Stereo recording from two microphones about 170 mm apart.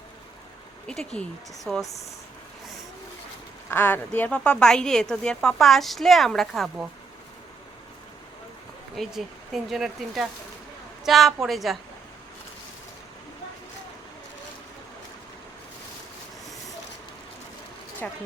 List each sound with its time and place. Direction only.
0.9 s speech: 5° left (ahead or behind)
1.8 s speech: 20° left (ahead or behind)
3.7 s speech: 10° left (ahead or behind)
9.0 s a woman's voice: centre (ahead or behind)
18.0 s a sound: 10° left (ahead or behind)